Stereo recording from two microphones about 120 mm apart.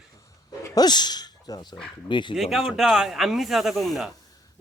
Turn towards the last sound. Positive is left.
turn(degrees=0)  # may be behind; listen again after turning